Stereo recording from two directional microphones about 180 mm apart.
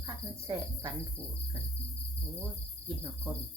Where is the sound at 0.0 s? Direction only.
15° right (ahead or behind).